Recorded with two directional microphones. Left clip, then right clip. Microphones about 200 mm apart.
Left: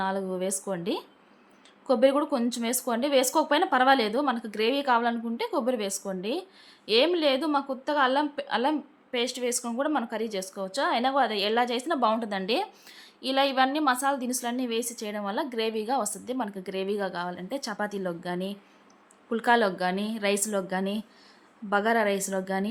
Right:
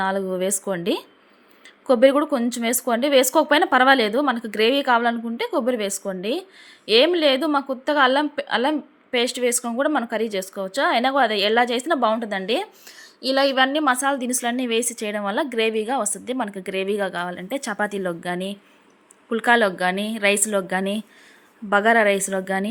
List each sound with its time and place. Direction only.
0.0 s a woman's voice: 15° right (ahead or behind)